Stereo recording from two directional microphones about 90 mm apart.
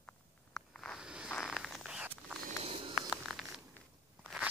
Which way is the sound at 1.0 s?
10° right (ahead or behind).